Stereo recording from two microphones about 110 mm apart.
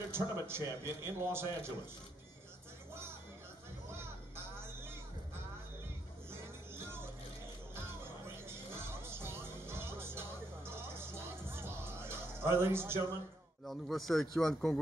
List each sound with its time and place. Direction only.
0.1 s a man's voice: 20° right (ahead or behind)
2.9 s music: 20° right (ahead or behind)
3.9 s a sound: 20° right (ahead or behind)
6.3 s music: 20° right (ahead or behind)
13.7 s speech: centre (ahead or behind)